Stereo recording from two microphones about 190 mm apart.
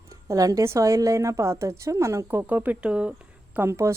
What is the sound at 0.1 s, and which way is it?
Speech, 15° right (ahead or behind).